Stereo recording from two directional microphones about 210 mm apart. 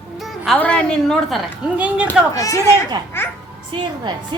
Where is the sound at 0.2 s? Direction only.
Centre (ahead or behind).